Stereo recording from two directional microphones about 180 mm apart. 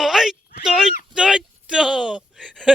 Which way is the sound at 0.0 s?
Centre (ahead or behind).